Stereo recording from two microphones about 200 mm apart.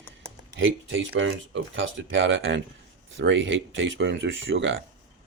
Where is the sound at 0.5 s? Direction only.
70° right (ahead or behind).